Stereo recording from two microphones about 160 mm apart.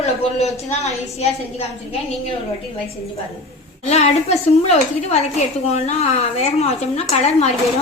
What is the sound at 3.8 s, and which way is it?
A woman's voice, 45° left (ahead or behind).